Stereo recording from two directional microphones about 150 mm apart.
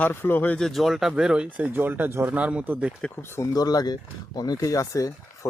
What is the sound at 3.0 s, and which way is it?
Speech, 15° left (ahead or behind).